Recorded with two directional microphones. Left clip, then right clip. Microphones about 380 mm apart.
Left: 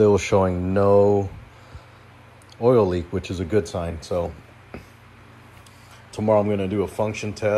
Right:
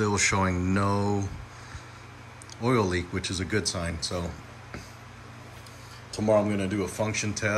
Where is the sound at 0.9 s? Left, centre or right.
Left.